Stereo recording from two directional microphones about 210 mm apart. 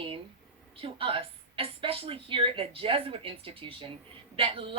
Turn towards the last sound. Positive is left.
turn(degrees=-25)  # may be behind; listen again after turning